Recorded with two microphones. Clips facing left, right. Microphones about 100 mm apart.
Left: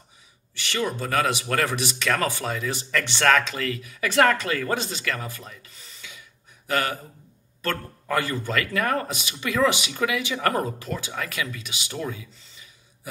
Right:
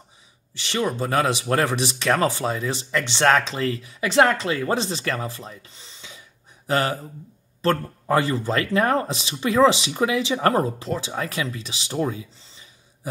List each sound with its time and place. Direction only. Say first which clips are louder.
0.6 s speech: right 3 dB; 25° right (ahead or behind)